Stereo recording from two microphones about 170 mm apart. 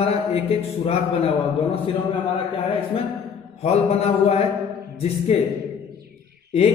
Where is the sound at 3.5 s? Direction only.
40° left (ahead or behind).